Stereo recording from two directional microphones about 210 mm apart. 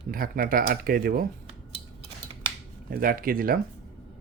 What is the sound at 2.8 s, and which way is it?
Speech, 45° right (ahead or behind).